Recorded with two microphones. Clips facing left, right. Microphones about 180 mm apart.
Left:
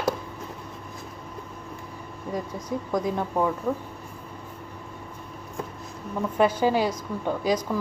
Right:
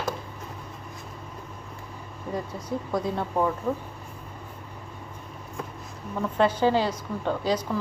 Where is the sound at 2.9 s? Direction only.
15° left (ahead or behind).